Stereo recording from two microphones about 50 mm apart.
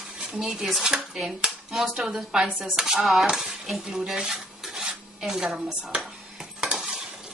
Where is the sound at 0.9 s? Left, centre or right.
Centre.